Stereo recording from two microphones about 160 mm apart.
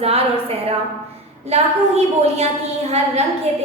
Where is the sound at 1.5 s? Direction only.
40° right (ahead or behind).